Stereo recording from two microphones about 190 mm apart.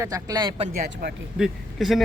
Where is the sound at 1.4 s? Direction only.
Centre (ahead or behind).